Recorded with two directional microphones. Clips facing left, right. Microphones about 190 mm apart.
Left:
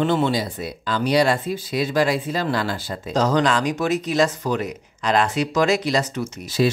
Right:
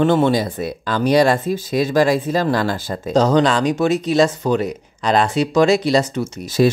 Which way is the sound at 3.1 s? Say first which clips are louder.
Right 4 dB; 30° right (ahead or behind).